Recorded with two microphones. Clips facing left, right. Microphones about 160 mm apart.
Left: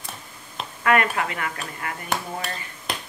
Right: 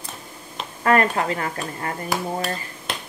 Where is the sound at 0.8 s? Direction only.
35° right (ahead or behind).